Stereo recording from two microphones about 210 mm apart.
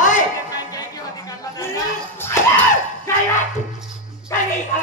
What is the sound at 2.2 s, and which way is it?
Screaming, 10° left (ahead or behind).